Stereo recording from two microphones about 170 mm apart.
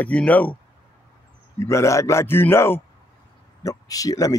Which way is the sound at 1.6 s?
15° left (ahead or behind).